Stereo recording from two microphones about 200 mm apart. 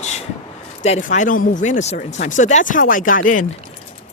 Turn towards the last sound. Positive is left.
turn(degrees=45)  # may be behind; listen again after turning